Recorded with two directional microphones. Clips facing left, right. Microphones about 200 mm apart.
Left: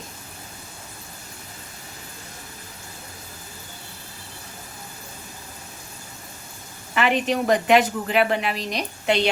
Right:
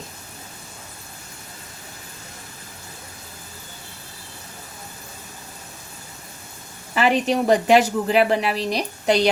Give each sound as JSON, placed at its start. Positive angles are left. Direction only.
{"t": 6.9, "sound": "a woman's voice", "side_deg": -35}